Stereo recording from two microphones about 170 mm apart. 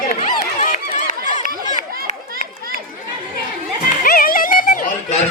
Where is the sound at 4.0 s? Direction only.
55° left (ahead or behind).